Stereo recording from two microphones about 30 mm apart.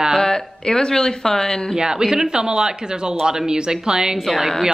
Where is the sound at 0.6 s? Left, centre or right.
Left.